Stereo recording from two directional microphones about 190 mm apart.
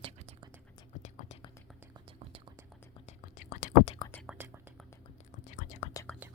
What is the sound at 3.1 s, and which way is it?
Whispering, 45° left (ahead or behind).